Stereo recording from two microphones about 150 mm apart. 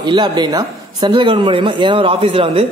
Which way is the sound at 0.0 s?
30° right (ahead or behind).